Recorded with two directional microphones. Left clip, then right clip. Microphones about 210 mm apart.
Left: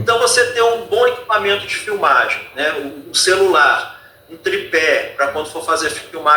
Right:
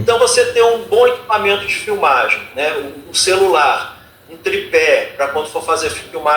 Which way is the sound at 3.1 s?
15° left (ahead or behind).